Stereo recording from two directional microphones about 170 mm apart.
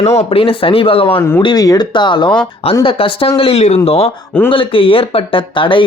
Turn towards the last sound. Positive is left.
turn(degrees=30)  # may be behind; listen again after turning